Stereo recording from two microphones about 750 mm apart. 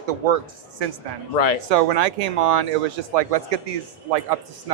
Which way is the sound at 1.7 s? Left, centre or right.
Right.